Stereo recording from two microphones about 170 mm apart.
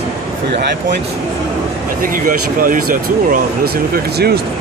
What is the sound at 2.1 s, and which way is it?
Speech, 55° right (ahead or behind).